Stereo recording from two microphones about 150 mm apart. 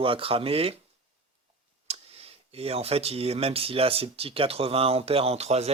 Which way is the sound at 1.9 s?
40° right (ahead or behind).